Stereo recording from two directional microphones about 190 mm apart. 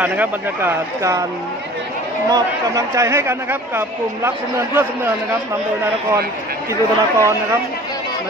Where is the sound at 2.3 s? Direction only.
20° right (ahead or behind).